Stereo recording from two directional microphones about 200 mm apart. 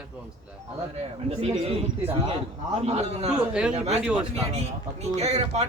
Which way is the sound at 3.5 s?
5° right (ahead or behind).